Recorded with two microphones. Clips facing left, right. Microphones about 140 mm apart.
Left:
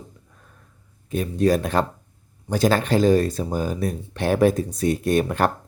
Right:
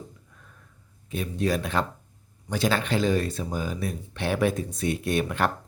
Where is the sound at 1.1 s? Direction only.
40° left (ahead or behind).